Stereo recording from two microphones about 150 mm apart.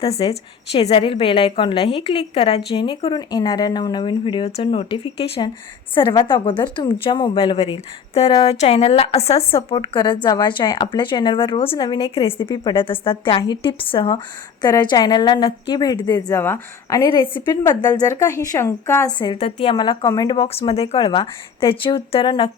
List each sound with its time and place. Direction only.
0.0 s a woman's voice: 40° left (ahead or behind); by 17.1 s 20° left (ahead or behind)
17.1 s a woman's voice: 30° left (ahead or behind)
19.4 s a woman's voice: 40° left (ahead or behind)